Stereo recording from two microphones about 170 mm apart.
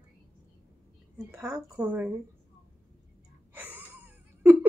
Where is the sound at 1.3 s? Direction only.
15° right (ahead or behind).